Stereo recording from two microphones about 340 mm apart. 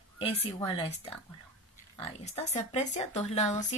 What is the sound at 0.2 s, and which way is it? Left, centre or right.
Speech, centre.